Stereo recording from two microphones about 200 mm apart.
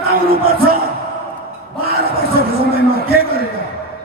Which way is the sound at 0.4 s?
50° right (ahead or behind).